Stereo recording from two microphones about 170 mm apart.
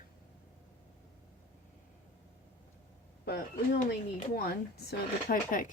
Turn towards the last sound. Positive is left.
turn(degrees=55)  # may be behind; listen again after turning